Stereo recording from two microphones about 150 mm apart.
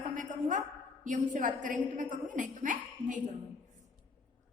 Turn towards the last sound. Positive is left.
turn(degrees=-55)  # may be behind; listen again after turning